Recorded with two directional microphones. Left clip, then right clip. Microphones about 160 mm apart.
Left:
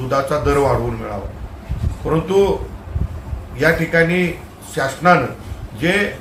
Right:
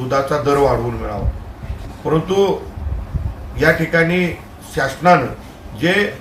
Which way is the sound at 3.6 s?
5° left (ahead or behind).